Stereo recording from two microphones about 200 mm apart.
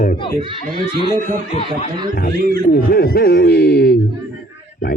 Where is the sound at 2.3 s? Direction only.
50° right (ahead or behind).